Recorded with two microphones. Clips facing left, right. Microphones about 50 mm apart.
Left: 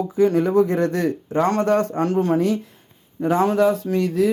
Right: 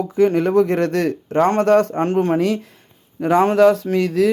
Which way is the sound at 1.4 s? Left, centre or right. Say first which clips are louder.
Right 4 dB; right.